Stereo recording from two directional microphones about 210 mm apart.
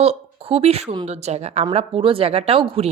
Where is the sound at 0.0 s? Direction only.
30° right (ahead or behind).